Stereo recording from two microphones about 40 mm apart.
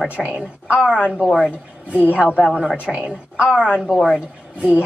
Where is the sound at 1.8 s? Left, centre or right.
Right.